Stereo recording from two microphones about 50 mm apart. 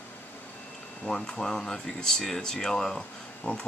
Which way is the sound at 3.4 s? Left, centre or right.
Left.